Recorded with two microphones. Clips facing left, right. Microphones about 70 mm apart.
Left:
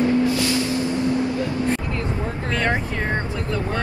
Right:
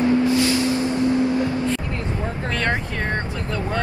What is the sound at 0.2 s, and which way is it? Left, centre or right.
Vehicle, right.